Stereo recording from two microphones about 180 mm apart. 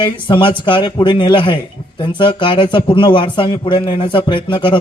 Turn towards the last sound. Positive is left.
turn(degrees=25)  # may be behind; listen again after turning